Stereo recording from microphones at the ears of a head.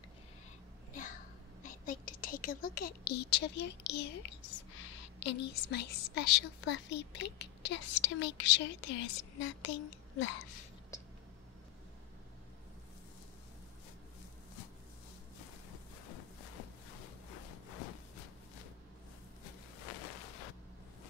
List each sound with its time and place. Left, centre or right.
0.9 s a woman's voice: left
15.7 s music: left
19.4 s a sound: left